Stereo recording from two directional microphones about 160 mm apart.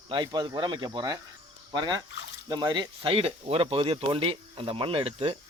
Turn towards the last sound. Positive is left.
turn(degrees=-35)  # may be behind; listen again after turning